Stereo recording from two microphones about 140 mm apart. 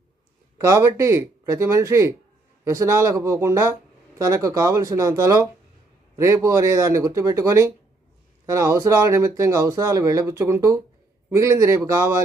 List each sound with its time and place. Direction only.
0.7 s speech: 20° right (ahead or behind)